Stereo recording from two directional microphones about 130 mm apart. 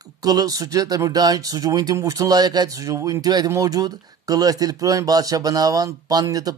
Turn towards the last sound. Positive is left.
turn(degrees=-30)  # may be behind; listen again after turning